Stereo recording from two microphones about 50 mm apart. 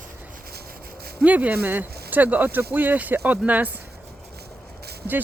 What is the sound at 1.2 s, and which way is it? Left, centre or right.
Speech, right.